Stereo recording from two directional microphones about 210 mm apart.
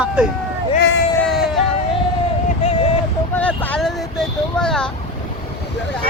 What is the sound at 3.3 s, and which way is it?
Vehicle, 5° left (ahead or behind).